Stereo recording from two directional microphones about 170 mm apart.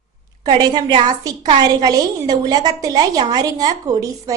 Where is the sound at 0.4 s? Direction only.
25° right (ahead or behind).